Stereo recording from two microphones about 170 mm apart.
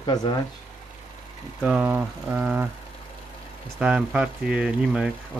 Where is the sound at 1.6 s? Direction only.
5° right (ahead or behind).